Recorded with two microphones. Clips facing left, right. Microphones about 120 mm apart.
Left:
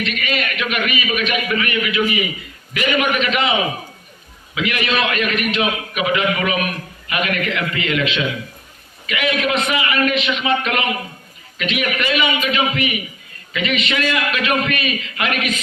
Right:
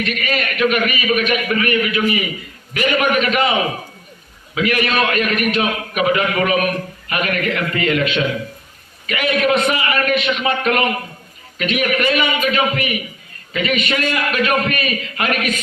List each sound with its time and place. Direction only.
0.0 s a man's voice: 40° right (ahead or behind)
4.5 s a man's voice: 40° right (ahead or behind)